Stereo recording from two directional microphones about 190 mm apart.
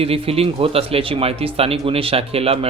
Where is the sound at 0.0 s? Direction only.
30° right (ahead or behind).